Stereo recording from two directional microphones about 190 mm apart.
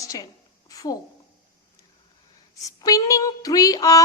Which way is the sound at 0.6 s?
20° left (ahead or behind).